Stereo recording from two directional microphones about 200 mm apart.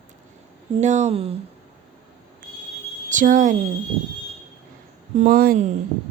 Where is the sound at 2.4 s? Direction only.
40° right (ahead or behind).